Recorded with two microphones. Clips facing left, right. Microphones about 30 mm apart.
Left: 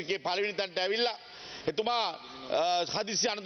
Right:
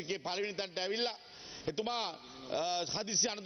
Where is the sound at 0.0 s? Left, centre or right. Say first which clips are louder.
Left 6 dB; left.